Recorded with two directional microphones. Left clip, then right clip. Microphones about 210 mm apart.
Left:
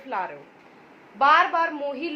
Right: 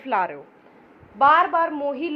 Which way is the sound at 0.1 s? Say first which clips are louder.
Right 6 dB; 50° right (ahead or behind).